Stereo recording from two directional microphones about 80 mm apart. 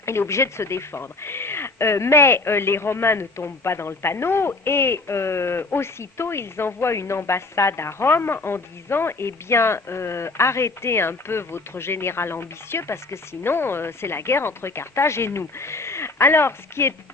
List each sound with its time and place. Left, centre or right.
0.0 s speech: left